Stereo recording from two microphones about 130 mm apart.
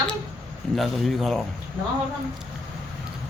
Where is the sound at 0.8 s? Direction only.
Centre (ahead or behind).